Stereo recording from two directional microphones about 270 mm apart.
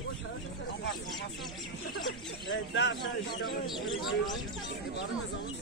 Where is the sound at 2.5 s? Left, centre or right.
Left.